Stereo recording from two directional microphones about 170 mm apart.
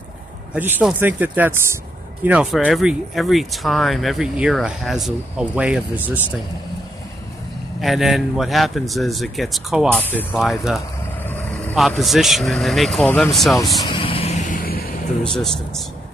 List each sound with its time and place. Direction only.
0.6 s speech: 10° right (ahead or behind)
7.8 s speech: centre (ahead or behind)
9.9 s speech: 10° left (ahead or behind)
10.3 s speech: centre (ahead or behind)
13.8 s vehicle: 30° left (ahead or behind)
14.5 s vehicle: 60° left (ahead or behind)
15.2 s speech: 5° left (ahead or behind)